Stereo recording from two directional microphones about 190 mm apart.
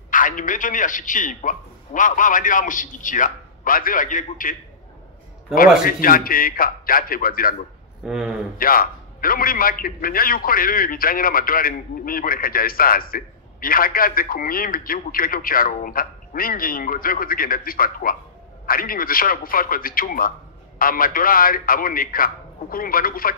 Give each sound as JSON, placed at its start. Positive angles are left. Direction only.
{"t": 0.1, "sound": "a man's voice", "side_deg": 45}
{"t": 5.9, "sound": "a man's voice", "side_deg": 50}
{"t": 8.0, "sound": "a man's voice", "side_deg": -5}
{"t": 8.5, "sound": "a man's voice", "side_deg": 50}